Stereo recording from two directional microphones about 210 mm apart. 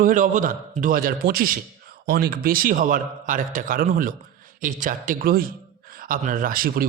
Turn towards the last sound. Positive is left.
turn(degrees=-45)  # may be behind; listen again after turning